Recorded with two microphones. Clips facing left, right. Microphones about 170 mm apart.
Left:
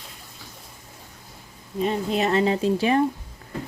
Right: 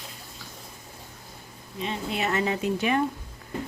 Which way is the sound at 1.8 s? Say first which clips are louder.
Left 7 dB; 40° left (ahead or behind).